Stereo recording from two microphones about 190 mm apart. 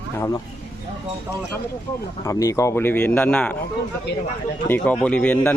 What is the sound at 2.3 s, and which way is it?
Speech, 15° left (ahead or behind).